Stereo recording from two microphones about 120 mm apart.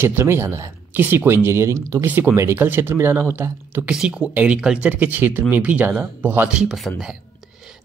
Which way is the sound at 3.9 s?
10° right (ahead or behind).